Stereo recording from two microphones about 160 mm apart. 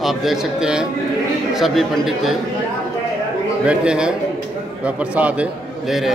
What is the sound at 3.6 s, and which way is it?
A man's voice, 5° right (ahead or behind).